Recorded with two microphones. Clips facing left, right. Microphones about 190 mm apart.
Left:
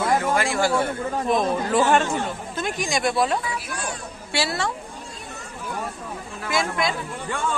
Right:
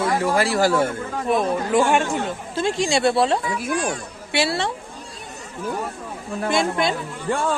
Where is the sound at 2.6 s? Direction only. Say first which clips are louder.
Right 6 dB; 30° right (ahead or behind).